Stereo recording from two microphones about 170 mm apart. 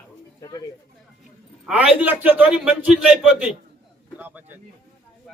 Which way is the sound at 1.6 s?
5° right (ahead or behind).